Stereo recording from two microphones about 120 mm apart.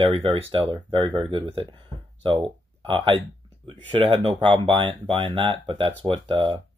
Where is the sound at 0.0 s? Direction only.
45° right (ahead or behind).